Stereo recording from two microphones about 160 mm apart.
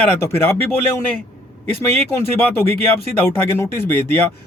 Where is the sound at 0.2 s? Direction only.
15° left (ahead or behind).